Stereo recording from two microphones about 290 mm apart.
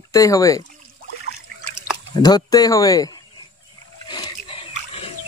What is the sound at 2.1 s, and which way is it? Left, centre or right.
Speech, centre.